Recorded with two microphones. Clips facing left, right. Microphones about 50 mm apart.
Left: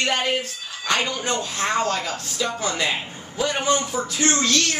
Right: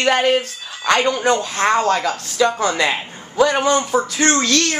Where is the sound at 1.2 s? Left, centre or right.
Right.